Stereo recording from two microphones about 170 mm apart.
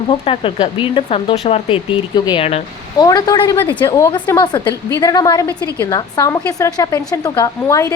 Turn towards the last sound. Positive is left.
turn(degrees=20)  # may be behind; listen again after turning